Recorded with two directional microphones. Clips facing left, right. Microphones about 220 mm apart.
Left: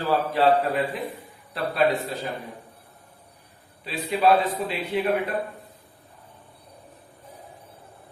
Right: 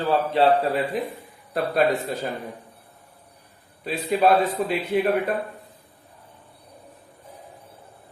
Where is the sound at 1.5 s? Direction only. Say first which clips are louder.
Right 2 dB; 45° right (ahead or behind).